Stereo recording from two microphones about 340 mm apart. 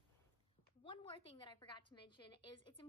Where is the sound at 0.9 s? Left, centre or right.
Centre.